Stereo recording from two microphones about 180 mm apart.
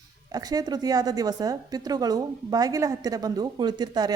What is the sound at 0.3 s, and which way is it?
Speech, 20° right (ahead or behind).